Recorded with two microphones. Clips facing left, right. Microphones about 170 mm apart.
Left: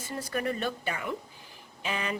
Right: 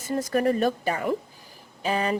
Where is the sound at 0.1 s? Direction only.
45° right (ahead or behind).